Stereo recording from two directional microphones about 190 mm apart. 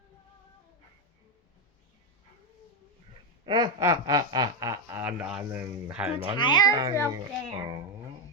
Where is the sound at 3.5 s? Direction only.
20° right (ahead or behind).